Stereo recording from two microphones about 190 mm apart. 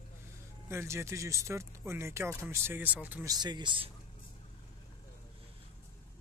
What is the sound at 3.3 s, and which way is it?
Speech, 20° right (ahead or behind).